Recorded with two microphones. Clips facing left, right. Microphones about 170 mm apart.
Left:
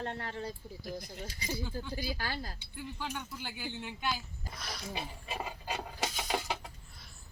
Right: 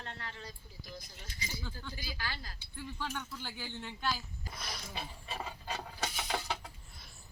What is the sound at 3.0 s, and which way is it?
Speech, 15° left (ahead or behind).